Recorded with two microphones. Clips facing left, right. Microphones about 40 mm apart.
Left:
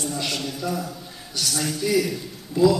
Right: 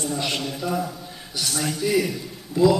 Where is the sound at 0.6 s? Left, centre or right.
Centre.